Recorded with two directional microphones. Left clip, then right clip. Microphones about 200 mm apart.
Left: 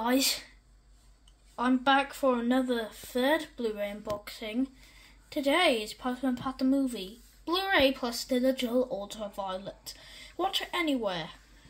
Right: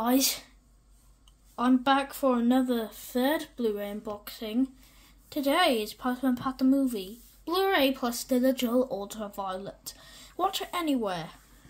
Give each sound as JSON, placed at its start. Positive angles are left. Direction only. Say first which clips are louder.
{"t": 0.0, "sound": "speech", "louder": "right 1 dB", "side_deg": -50}
{"t": 1.5, "sound": "a woman's voice", "louder": "right 1 dB", "side_deg": -55}